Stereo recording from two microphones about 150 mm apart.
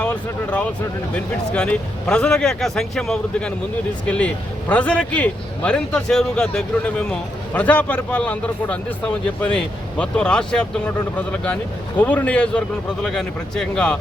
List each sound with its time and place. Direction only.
0.0 s a man's voice: 10° left (ahead or behind)